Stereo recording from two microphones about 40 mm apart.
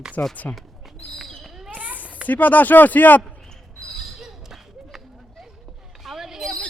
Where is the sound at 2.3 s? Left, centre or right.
Left.